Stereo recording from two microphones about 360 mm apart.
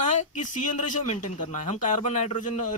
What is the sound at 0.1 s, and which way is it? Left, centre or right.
Speech, centre.